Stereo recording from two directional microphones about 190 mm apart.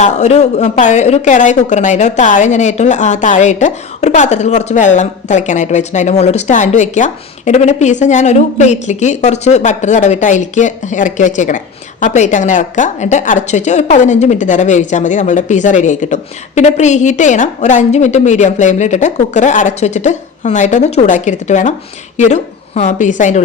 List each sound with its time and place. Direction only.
0.0 s a woman's voice: 35° left (ahead or behind)